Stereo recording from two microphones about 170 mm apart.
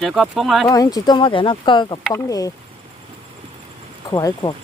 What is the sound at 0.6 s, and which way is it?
Speech, 20° left (ahead or behind).